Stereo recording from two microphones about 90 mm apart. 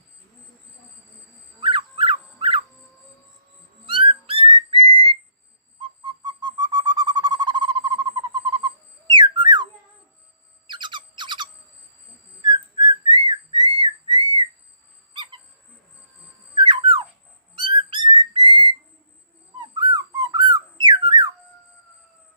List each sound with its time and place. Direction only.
1.6 s dog: 80° right
3.8 s whistling: 90° right
6.1 s owl: 55° right (ahead or behind)
10.7 s a sound: 60° right (ahead or behind)
12.4 s whistling: 50° right (ahead or behind)
13.1 s whistle: 55° right (ahead or behind)
15.1 s bird: 60° right (ahead or behind)
16.6 s dog: 70° right (ahead or behind)
17.5 s whistling: 65° right (ahead or behind)
19.5 s dog: 55° right (ahead or behind)
20.1 s a sound: 45° right (ahead or behind)